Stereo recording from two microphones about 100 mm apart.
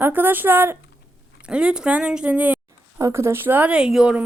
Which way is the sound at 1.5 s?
10° right (ahead or behind).